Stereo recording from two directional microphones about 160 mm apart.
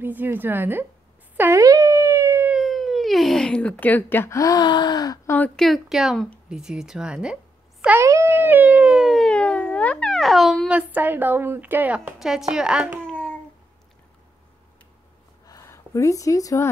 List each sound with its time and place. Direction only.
0.0 s speech: 10° right (ahead or behind); by 5.5 s 15° left (ahead or behind)
5.6 s speech: centre (ahead or behind)
13.0 s babbling: 5° left (ahead or behind)
15.4 s a sound: 20° left (ahead or behind)